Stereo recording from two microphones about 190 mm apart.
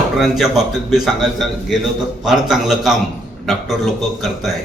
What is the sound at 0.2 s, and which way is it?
A man's voice, centre (ahead or behind).